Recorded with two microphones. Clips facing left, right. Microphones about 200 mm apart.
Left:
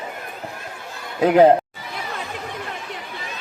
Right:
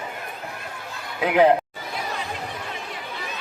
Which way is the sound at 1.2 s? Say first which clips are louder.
Left 5 dB; 40° left (ahead or behind).